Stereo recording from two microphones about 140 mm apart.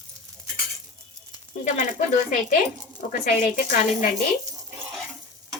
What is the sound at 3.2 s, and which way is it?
Speech, 80° left.